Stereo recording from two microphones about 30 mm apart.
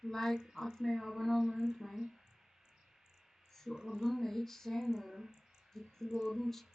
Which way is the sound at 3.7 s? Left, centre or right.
Right.